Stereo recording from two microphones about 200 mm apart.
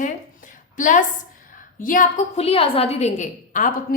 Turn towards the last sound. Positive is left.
turn(degrees=40)  # may be behind; listen again after turning